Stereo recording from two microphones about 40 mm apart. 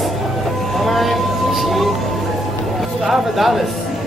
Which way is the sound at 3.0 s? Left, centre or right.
Centre.